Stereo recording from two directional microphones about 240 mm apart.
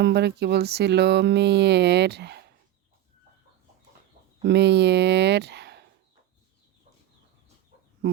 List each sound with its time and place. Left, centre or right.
0.0 s speech: right
4.4 s speech: right